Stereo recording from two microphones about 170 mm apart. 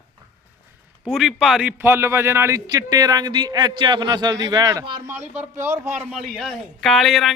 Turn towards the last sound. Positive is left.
turn(degrees=0)  # may be behind; listen again after turning